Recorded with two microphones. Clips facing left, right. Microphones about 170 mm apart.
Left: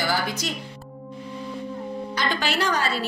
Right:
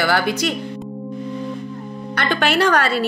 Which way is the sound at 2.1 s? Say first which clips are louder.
Right 8 dB; 65° right (ahead or behind).